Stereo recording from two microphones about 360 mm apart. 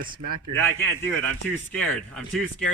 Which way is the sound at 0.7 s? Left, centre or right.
Centre.